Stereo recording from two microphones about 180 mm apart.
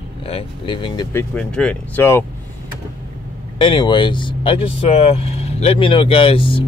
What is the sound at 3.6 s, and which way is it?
Speech, 25° left (ahead or behind).